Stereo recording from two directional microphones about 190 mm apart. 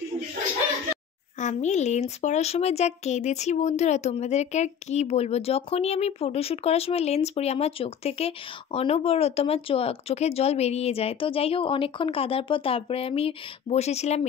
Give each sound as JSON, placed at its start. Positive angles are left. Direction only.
{"t": 1.4, "sound": "a woman's voice", "side_deg": 40}